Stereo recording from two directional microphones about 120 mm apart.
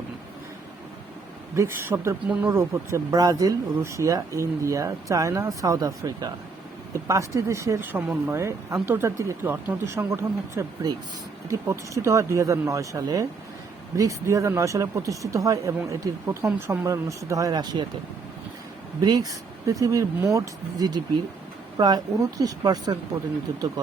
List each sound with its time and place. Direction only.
1.5 s speech: 20° right (ahead or behind)
2.2 s speech: 10° right (ahead or behind)
2.5 s speech: 20° right (ahead or behind)
19.0 s speech: 30° right (ahead or behind)